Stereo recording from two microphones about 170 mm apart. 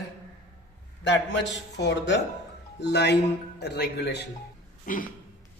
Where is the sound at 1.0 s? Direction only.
90° left.